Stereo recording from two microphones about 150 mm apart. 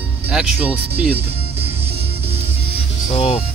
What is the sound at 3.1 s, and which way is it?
Speech, 40° left (ahead or behind).